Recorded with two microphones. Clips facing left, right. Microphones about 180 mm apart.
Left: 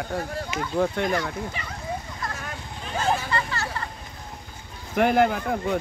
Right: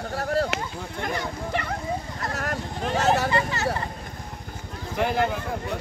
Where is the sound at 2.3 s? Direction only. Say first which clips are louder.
Right 6 dB; 70° right (ahead or behind).